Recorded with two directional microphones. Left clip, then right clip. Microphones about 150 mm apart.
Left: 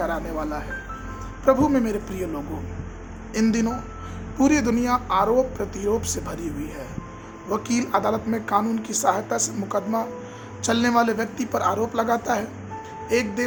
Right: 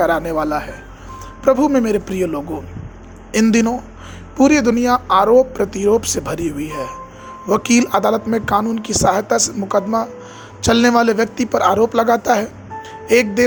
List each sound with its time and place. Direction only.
0.0 s speech: 45° right (ahead or behind)
3.5 s speech: 45° right (ahead or behind)
4.4 s speech: 35° right (ahead or behind)